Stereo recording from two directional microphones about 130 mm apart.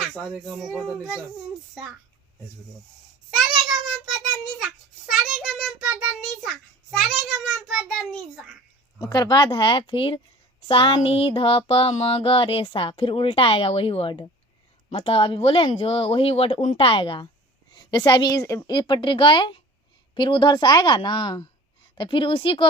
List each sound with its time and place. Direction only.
0.1 s a child's voice: 5° left (ahead or behind)
4.6 s child singing: centre (ahead or behind)
9.0 s a woman's voice: 30° left (ahead or behind)
10.7 s a sound: 40° left (ahead or behind)
16.7 s a woman's voice: 45° left (ahead or behind)